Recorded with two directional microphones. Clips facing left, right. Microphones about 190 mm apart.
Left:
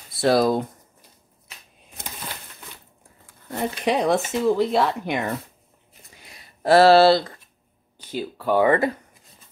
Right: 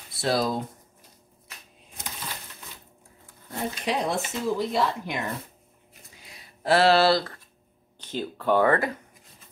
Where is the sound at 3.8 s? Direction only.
65° left (ahead or behind).